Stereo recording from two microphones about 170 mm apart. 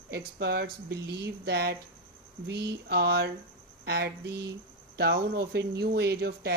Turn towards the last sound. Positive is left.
turn(degrees=-70)  # may be behind; listen again after turning